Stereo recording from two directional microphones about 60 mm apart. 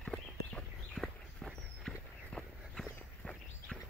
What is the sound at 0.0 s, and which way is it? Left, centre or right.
Walk, centre.